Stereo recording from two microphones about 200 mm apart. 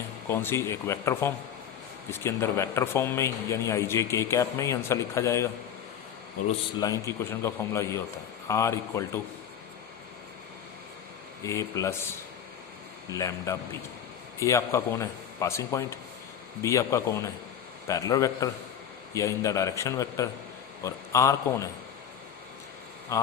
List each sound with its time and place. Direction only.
0.3 s a man's voice: 10° left (ahead or behind)
6.7 s a man's voice: 15° left (ahead or behind)
11.4 s a man's voice: 15° left (ahead or behind)
23.1 s a man's voice: 15° left (ahead or behind)